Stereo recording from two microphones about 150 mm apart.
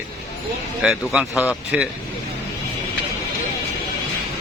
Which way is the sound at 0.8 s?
5° right (ahead or behind).